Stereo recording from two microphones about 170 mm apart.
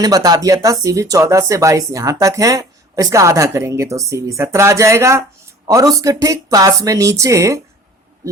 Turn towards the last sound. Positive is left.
turn(degrees=-15)  # may be behind; listen again after turning